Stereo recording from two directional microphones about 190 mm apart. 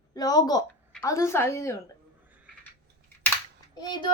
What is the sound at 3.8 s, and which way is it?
Speech, 20° left (ahead or behind).